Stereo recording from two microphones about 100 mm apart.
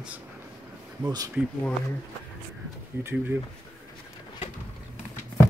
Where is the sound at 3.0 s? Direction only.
20° right (ahead or behind).